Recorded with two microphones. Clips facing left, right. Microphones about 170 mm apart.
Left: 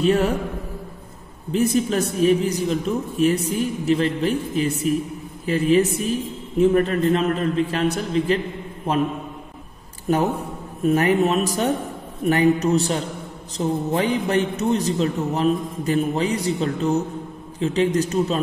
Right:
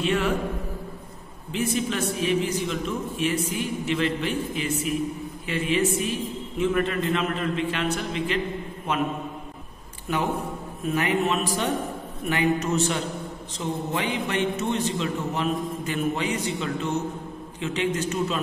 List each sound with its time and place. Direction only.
0.0 s a man's voice: 40° left (ahead or behind)
1.5 s a man's voice: 40° left (ahead or behind)
10.0 s a man's voice: 40° left (ahead or behind)